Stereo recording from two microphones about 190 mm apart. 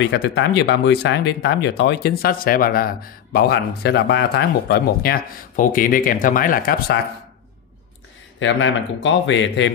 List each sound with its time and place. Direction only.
0.1 s speech: 65° left (ahead or behind)
8.4 s a man's voice: 80° left